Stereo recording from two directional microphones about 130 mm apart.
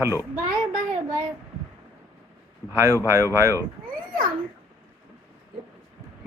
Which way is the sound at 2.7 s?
25° right (ahead or behind).